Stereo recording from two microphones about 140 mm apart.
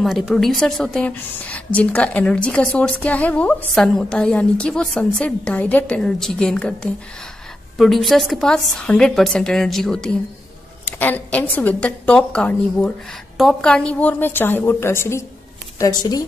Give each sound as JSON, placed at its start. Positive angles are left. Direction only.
{"t": 0.0, "sound": "a woman's voice", "side_deg": 0}